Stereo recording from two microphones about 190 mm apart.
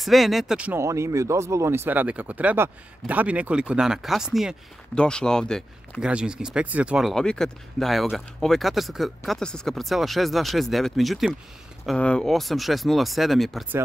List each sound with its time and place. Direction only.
0.0 s speech: centre (ahead or behind)